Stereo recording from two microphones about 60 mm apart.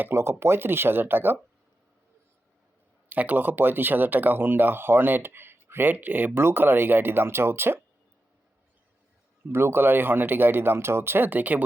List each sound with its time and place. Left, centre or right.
0.0 s speech: right
3.1 s speech: right
9.5 s speech: right